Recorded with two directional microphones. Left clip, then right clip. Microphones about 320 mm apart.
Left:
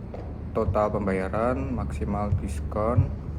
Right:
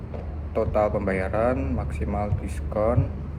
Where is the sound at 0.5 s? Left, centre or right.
Centre.